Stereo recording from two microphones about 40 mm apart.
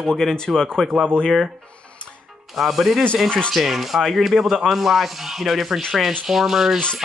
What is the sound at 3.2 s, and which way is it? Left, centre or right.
Speech, left.